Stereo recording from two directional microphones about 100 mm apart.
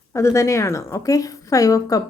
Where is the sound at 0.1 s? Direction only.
30° left (ahead or behind).